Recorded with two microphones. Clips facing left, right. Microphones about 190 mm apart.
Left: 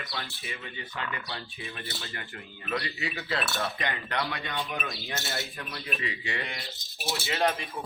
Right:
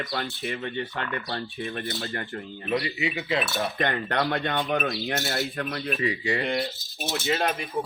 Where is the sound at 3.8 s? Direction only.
55° right (ahead or behind).